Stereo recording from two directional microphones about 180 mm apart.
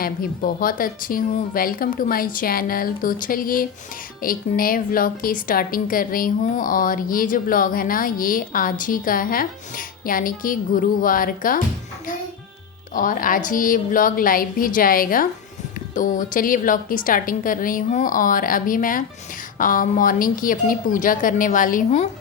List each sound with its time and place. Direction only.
0.0 s a woman's voice: 55° left (ahead or behind)
12.9 s a woman's voice: 50° left (ahead or behind)